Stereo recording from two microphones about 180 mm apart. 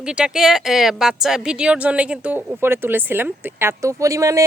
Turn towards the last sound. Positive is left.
turn(degrees=-20)  # may be behind; listen again after turning